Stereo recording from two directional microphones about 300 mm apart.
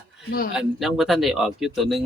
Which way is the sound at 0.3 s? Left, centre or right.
Left.